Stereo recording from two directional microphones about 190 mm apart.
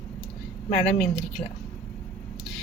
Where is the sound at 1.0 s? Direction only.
5° left (ahead or behind).